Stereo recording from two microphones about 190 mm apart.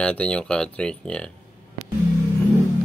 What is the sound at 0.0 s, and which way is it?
Speech, 5° left (ahead or behind).